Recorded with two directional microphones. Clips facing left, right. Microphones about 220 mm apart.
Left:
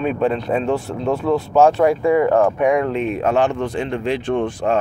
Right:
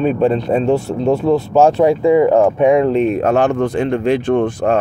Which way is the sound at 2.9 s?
40° right (ahead or behind).